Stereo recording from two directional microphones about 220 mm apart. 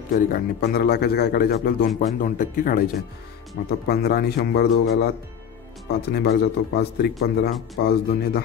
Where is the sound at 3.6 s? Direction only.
50° left (ahead or behind).